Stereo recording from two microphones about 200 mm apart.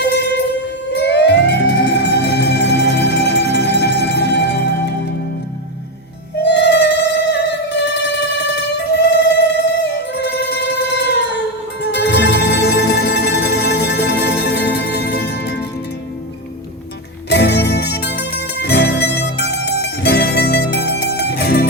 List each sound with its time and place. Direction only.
0.0 s music: 60° left (ahead or behind)
6.4 s music: 60° left (ahead or behind)
8.9 s music: 55° left (ahead or behind)
17.2 s music: 55° left (ahead or behind)